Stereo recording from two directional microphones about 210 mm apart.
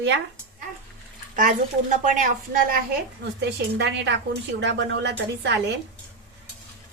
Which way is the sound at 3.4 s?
55° right (ahead or behind).